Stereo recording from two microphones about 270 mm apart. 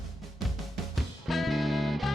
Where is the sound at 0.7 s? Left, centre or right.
Centre.